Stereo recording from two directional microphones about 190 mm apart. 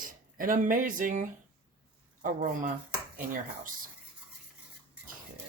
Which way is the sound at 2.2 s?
45° right (ahead or behind).